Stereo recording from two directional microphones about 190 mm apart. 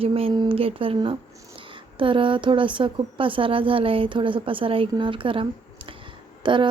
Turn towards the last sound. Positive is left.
turn(degrees=-25)  # may be behind; listen again after turning